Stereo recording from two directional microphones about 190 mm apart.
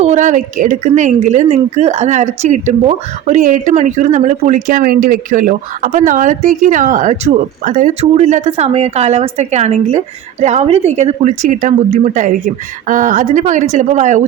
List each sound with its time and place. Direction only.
0.0 s speech: 40° right (ahead or behind)